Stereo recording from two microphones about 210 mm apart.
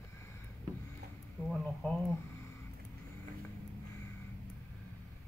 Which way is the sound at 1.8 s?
10° left (ahead or behind).